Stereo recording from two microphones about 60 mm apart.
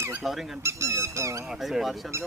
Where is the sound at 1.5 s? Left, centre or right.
Centre.